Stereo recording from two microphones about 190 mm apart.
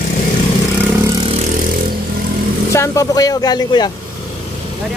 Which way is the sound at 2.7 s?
15° left (ahead or behind).